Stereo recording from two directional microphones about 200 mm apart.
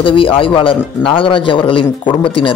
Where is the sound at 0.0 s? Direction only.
25° left (ahead or behind).